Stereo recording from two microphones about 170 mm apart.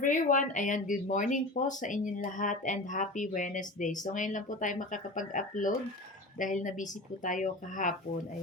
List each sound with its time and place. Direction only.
0.0 s speech: 50° left (ahead or behind)